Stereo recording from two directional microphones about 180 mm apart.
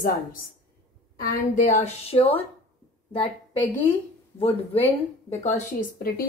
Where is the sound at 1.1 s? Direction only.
45° left (ahead or behind).